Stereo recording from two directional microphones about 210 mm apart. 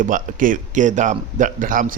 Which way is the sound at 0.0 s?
40° right (ahead or behind).